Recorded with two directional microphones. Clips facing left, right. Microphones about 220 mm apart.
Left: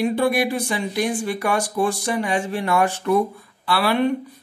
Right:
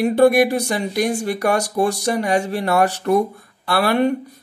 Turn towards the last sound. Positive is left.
turn(degrees=-45)  # may be behind; listen again after turning